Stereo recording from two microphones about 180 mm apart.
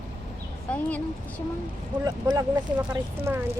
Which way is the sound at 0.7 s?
5° left (ahead or behind).